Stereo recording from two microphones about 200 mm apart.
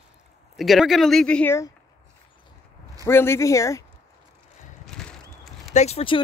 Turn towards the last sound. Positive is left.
turn(degrees=30)  # may be behind; listen again after turning